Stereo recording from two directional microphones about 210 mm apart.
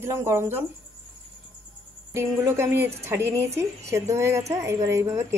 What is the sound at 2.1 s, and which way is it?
A woman's voice, 10° right (ahead or behind).